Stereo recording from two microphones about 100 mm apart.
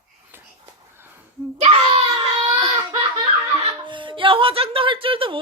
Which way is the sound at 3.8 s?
55° right (ahead or behind).